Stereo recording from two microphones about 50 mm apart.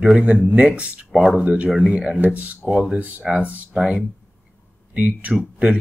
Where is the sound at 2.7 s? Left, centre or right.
Right.